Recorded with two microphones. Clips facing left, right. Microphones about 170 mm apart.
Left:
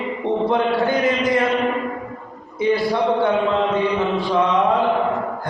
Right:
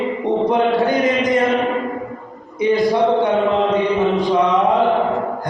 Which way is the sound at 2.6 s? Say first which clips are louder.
Right 3 dB; 20° right (ahead or behind).